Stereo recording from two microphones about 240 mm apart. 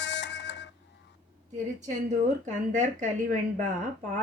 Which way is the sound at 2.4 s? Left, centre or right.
Right.